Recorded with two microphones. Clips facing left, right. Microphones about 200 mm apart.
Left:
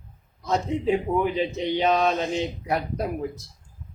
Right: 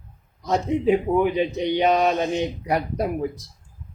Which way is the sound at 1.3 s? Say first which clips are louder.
Right 3 dB; 15° right (ahead or behind).